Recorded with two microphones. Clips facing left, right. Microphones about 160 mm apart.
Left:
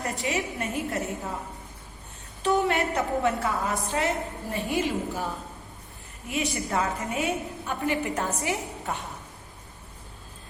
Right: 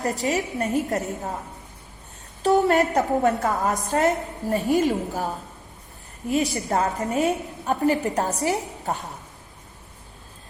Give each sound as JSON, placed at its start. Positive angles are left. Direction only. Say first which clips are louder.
{"t": 0.0, "sound": "a woman's voice", "louder": "right 5 dB", "side_deg": -40}
{"t": 2.4, "sound": "a woman's voice", "louder": "right 5 dB", "side_deg": -40}